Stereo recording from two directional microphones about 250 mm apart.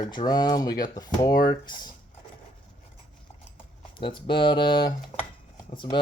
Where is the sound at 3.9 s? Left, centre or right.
Centre.